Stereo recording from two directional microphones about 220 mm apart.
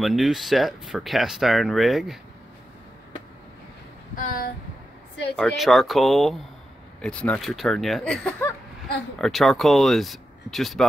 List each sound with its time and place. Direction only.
0.0 s speech: centre (ahead or behind)
4.1 s a sound: 40° left (ahead or behind)
5.3 s speech: centre (ahead or behind)